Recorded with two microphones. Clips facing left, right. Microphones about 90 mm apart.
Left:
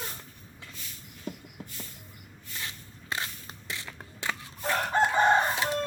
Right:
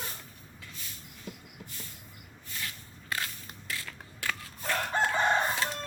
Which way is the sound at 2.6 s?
25° left (ahead or behind).